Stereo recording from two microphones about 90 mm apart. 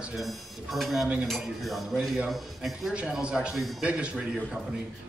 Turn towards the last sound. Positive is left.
turn(degrees=-10)  # may be behind; listen again after turning